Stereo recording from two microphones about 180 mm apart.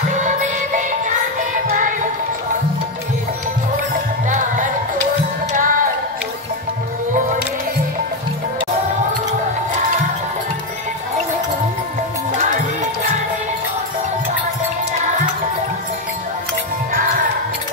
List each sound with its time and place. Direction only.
0.1 s music: 45° right (ahead or behind)
5.5 s music: 50° right (ahead or behind)